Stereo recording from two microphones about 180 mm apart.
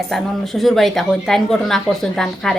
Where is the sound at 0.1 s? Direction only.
Centre (ahead or behind).